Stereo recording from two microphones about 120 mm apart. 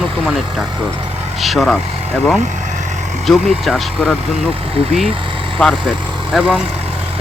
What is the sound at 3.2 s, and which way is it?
Speech, centre (ahead or behind).